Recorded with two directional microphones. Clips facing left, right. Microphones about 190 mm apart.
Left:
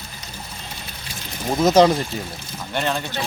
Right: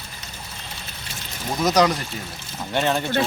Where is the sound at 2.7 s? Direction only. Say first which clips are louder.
Right 2 dB; 15° right (ahead or behind).